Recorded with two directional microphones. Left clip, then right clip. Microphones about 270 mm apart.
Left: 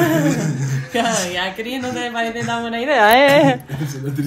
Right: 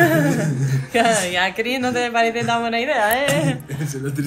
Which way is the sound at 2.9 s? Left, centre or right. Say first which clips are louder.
Left 10 dB; left.